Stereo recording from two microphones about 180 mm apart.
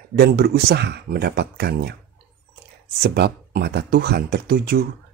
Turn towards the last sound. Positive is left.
turn(degrees=-55)  # may be behind; listen again after turning